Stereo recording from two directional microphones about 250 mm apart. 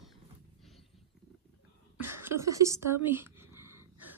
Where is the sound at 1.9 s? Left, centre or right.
Centre.